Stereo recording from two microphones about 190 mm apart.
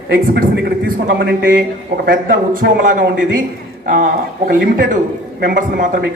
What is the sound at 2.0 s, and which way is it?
A man's voice, 50° right (ahead or behind).